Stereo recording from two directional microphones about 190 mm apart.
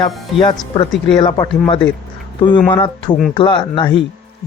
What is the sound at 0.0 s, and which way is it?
Speech, 25° left (ahead or behind).